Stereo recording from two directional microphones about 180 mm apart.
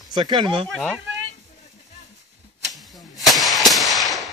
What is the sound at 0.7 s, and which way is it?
Speech, 5° left (ahead or behind).